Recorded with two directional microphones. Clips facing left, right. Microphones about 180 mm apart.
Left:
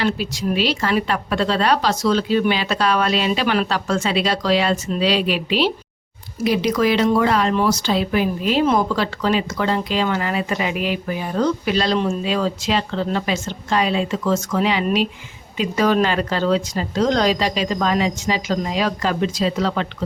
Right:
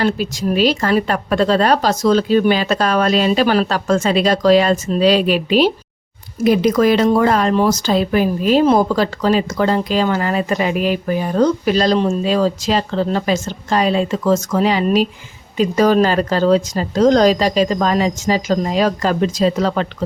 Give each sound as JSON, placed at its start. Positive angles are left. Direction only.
{"t": 0.0, "sound": "a woman's voice", "side_deg": -45}